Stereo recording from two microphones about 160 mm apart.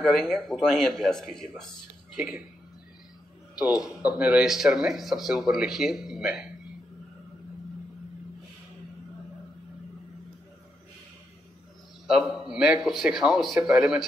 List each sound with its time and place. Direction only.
0.0 s speech: centre (ahead or behind)
3.5 s speech: 5° right (ahead or behind)
12.1 s speech: 5° right (ahead or behind)